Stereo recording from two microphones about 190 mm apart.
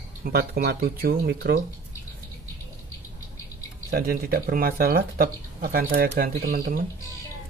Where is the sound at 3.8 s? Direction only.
50° right (ahead or behind).